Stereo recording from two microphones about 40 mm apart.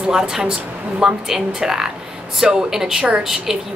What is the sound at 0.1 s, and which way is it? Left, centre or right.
A woman's voice, centre.